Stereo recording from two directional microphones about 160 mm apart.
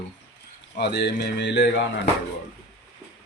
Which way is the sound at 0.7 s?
90° left.